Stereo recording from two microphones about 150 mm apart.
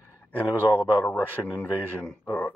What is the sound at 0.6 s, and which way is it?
A man's voice, 10° left (ahead or behind).